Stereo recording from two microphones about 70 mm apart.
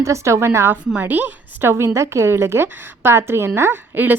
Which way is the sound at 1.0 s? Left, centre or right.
Right.